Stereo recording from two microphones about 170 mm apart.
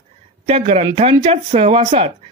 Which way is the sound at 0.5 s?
35° right (ahead or behind).